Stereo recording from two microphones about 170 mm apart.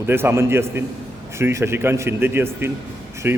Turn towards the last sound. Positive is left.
turn(degrees=-10)  # may be behind; listen again after turning